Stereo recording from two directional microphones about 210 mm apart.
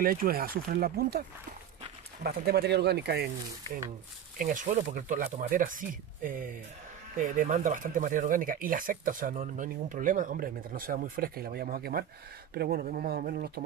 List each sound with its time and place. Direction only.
0.0 s speech: 45° right (ahead or behind)
2.2 s speech: 50° right (ahead or behind)
4.4 s speech: 40° right (ahead or behind)